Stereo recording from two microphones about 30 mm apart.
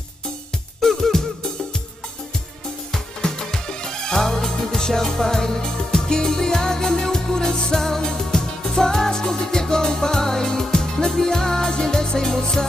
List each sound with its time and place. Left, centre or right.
0.7 s music: centre
3.2 s music: left